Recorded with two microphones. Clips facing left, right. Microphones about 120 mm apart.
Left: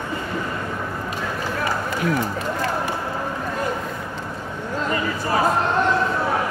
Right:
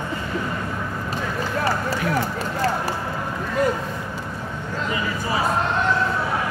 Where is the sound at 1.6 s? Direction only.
35° right (ahead or behind).